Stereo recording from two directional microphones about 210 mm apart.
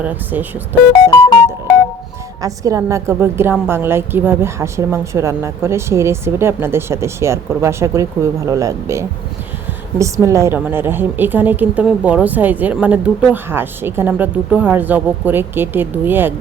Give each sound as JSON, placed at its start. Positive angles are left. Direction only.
{"t": 0.0, "sound": "a woman's voice", "side_deg": -10}
{"t": 2.4, "sound": "a woman's voice", "side_deg": -15}